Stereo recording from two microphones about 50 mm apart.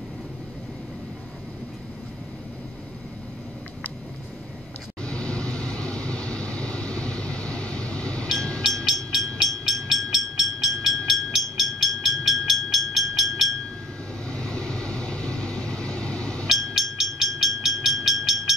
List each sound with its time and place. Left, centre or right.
5.0 s vehicle: left
8.4 s train: centre
8.8 s vehicle: centre
12.6 s train: centre
14.3 s vehicle: centre
16.4 s train: centre